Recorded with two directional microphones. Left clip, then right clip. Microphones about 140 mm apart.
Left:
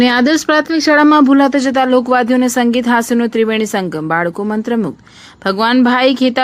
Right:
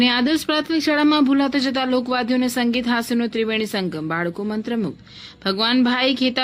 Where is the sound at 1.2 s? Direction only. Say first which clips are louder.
Left 8 dB; 30° left (ahead or behind).